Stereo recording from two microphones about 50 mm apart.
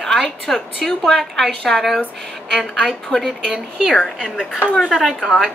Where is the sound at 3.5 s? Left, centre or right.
Centre.